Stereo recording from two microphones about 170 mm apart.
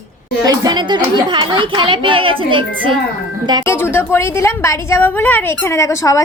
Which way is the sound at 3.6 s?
15° left (ahead or behind).